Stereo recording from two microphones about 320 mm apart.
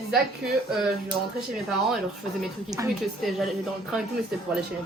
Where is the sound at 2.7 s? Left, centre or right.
Centre.